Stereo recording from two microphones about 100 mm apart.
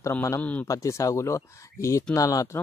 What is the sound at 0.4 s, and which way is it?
Speech, 15° left (ahead or behind).